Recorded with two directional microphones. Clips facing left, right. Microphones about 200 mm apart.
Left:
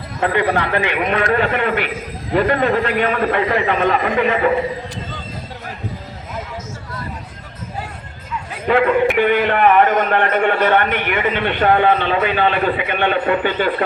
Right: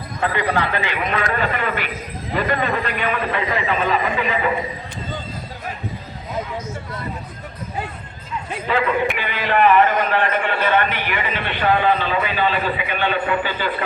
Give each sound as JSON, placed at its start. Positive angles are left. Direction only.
{"t": 0.3, "sound": "a man's voice", "side_deg": 60}
{"t": 8.6, "sound": "a man's voice", "side_deg": 50}